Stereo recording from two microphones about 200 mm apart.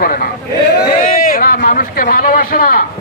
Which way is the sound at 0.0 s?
45° left (ahead or behind).